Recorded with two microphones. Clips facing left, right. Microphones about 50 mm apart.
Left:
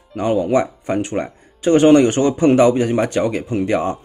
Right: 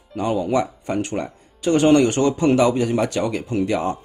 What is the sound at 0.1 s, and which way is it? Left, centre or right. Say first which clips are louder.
Speech: left 4 dB; left.